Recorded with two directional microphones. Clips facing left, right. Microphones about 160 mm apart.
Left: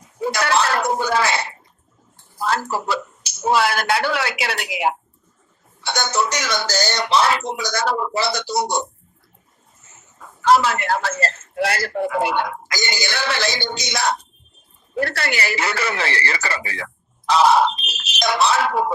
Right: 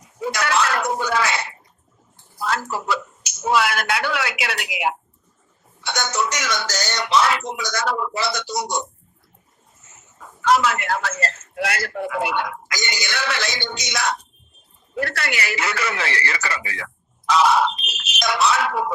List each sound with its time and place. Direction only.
0.2 s speech: 35° left (ahead or behind)
10.4 s speech: 30° left (ahead or behind)